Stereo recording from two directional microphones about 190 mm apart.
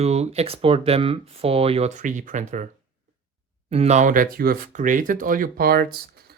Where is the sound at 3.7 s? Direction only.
35° right (ahead or behind).